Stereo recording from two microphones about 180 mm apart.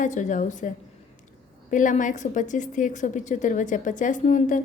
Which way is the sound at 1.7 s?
45° left (ahead or behind).